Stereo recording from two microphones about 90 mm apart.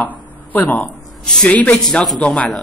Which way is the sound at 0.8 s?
5° left (ahead or behind).